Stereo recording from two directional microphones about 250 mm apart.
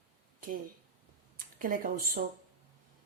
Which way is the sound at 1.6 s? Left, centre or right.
Right.